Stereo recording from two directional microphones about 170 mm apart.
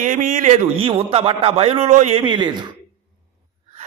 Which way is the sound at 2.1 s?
25° right (ahead or behind).